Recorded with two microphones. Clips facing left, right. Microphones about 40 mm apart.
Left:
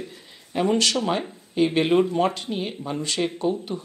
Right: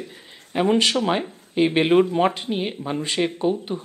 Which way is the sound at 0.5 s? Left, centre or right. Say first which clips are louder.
Right 2 dB; right.